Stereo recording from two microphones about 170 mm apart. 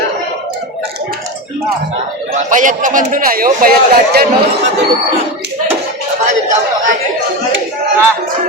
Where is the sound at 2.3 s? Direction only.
50° right (ahead or behind); by 4.3 s 65° right (ahead or behind).